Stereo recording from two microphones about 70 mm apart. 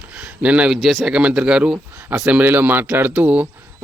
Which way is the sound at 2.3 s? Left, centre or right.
Right.